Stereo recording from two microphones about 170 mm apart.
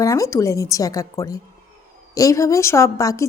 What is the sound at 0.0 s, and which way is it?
A woman's voice, 20° left (ahead or behind).